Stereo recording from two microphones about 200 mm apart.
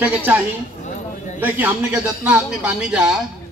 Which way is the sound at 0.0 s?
10° right (ahead or behind).